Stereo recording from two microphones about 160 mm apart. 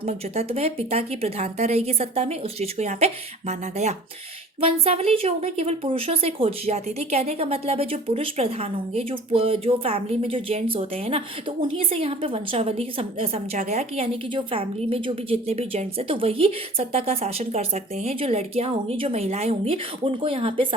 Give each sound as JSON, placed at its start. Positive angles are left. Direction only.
{"t": 0.0, "sound": "a woman's voice", "side_deg": -40}